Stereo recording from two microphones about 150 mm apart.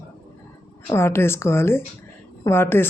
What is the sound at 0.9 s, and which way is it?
Speech, 15° left (ahead or behind).